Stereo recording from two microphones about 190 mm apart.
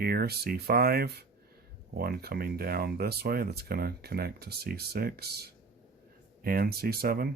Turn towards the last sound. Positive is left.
turn(degrees=-55)  # may be behind; listen again after turning